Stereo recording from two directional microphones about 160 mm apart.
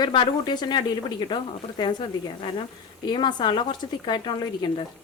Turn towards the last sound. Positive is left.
turn(degrees=30)  # may be behind; listen again after turning